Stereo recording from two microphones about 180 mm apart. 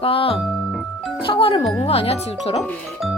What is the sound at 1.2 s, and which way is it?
Speech, 30° left (ahead or behind).